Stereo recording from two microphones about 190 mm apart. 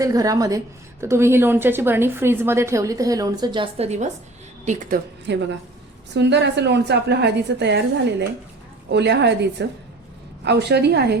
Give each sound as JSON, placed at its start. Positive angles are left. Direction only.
{"t": 0.0, "sound": "a woman's voice", "side_deg": -20}
{"t": 5.3, "sound": "a woman's voice", "side_deg": -70}
{"t": 8.9, "sound": "a woman's voice", "side_deg": -65}